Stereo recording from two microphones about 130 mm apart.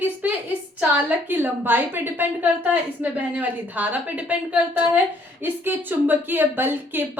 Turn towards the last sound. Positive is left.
turn(degrees=-15)  # may be behind; listen again after turning